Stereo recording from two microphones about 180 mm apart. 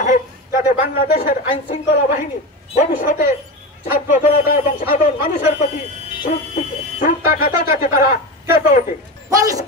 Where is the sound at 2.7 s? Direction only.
50° left (ahead or behind).